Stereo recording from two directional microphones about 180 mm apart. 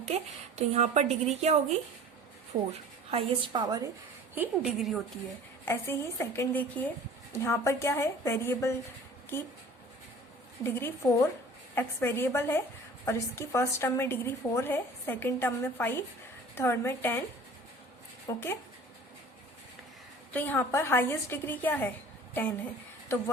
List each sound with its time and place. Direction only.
0.1 s a woman's voice: 35° right (ahead or behind)
2.7 s a woman's voice: 35° right (ahead or behind)
4.4 s a woman's voice: centre (ahead or behind)
5.6 s a woman's voice: 15° left (ahead or behind)
10.6 s a woman's voice: 15° left (ahead or behind)
18.3 s a woman's voice: 15° left (ahead or behind)
20.3 s a woman's voice: 10° left (ahead or behind)